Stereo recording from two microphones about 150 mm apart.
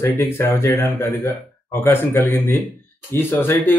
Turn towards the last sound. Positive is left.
turn(degrees=15)  # may be behind; listen again after turning